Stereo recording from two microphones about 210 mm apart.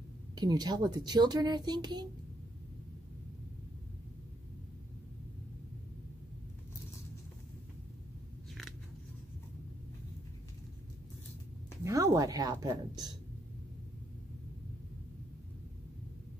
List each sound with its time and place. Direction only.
0.4 s speech: 20° right (ahead or behind)
11.8 s a woman's voice: 15° right (ahead or behind)